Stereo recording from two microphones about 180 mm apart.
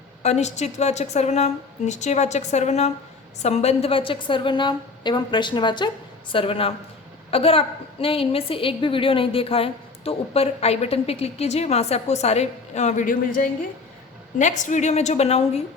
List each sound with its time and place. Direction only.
0.2 s a woman's voice: 40° left (ahead or behind)